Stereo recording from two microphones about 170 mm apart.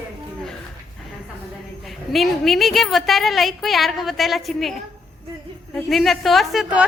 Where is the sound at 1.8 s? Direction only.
Centre (ahead or behind).